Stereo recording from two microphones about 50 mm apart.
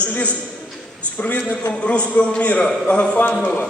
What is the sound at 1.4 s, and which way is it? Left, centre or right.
A man's voice, left.